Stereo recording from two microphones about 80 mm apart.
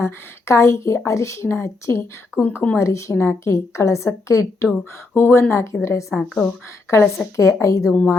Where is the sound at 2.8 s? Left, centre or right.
Left.